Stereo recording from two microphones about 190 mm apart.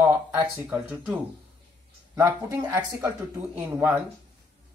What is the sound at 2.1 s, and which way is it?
Speech, 15° right (ahead or behind).